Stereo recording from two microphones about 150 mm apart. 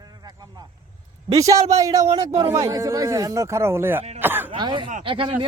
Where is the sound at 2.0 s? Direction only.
40° right (ahead or behind).